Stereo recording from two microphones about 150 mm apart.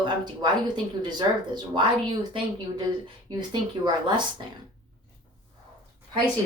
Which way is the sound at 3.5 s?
30° right (ahead or behind).